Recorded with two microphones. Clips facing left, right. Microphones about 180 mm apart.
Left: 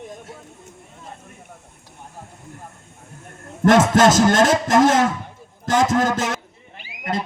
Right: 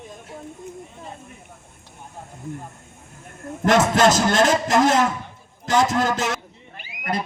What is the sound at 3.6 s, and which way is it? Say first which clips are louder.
A man's voice: left 3 dB; 50° left (ahead or behind).